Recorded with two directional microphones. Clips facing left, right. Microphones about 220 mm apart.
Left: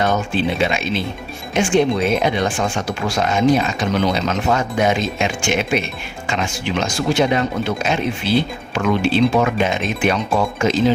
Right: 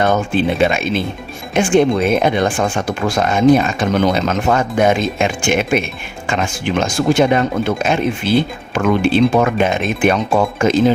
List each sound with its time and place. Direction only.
0.0 s speech: 50° right (ahead or behind)